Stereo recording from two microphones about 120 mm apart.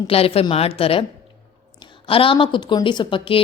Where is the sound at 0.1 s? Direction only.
55° left (ahead or behind).